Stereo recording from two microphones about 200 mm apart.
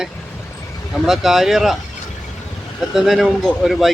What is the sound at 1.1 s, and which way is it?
Speech, centre (ahead or behind).